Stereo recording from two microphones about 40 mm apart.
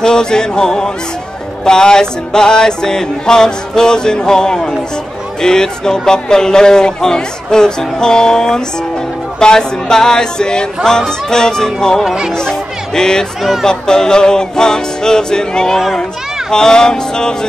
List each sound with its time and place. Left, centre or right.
0.0 s speech: centre
12.0 s speech: centre
12.4 s speech: centre
13.4 s speech: centre
13.7 s speech: centre